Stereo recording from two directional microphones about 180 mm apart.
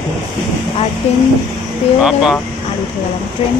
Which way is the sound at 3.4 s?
30° left (ahead or behind).